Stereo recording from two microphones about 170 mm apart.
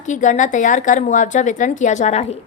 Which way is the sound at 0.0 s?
45° left (ahead or behind).